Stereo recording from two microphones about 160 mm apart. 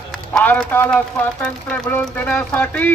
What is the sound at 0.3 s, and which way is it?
Speech, 10° left (ahead or behind).